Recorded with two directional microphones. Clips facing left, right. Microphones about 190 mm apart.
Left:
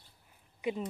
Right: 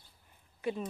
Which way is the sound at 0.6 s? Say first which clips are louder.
Left 1 dB; 15° left (ahead or behind).